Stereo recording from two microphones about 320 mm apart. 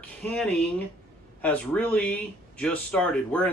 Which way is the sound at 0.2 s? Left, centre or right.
Centre.